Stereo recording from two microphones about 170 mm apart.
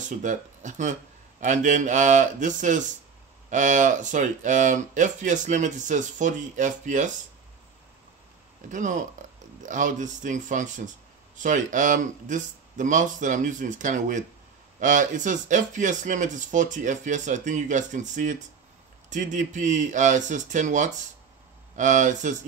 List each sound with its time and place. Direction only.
0.0 s speech: 45° right (ahead or behind)
8.6 s speech: 50° right (ahead or behind)